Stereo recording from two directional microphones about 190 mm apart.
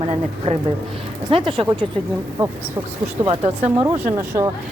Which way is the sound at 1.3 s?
25° right (ahead or behind).